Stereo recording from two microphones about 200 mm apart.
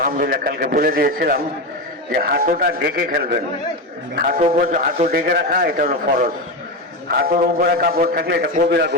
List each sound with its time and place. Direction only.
0.0 s a man's voice: 45° right (ahead or behind)
4.5 s a man's voice: 40° right (ahead or behind)